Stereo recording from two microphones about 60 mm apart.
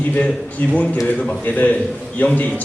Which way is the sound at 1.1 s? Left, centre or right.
Centre.